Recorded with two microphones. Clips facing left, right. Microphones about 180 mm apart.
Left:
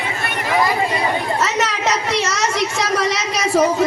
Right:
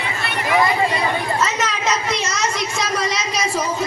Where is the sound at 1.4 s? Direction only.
70° left (ahead or behind).